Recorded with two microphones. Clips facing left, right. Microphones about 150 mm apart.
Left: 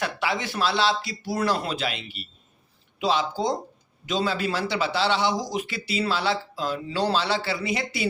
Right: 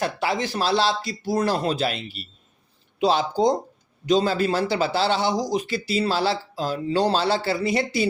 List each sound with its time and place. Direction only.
0.0 s a man's voice: 40° right (ahead or behind)